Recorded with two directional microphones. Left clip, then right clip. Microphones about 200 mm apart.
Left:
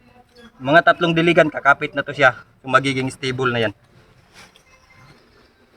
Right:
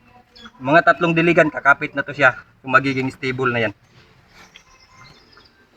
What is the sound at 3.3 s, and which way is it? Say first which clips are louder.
Speech: even; 15° left (ahead or behind).